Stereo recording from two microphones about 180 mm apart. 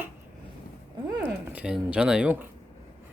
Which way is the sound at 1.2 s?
10° right (ahead or behind).